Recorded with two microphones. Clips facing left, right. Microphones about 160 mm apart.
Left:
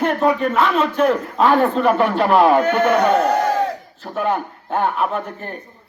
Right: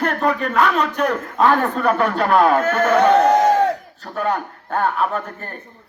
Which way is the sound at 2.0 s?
20° left (ahead or behind).